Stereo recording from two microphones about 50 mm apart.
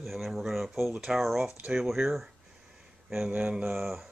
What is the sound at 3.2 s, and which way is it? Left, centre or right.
Mantra, right.